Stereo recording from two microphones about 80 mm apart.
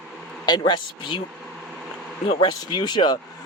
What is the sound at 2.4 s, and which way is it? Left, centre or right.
Speech, left.